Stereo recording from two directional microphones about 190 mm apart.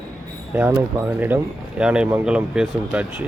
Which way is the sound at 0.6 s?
10° right (ahead or behind).